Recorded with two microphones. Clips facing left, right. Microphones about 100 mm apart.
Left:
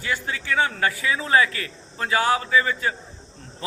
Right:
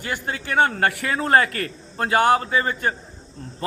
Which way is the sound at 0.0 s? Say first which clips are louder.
Even; 45° right (ahead or behind).